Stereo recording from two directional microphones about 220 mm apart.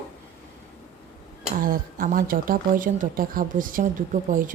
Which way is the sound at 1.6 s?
40° right (ahead or behind).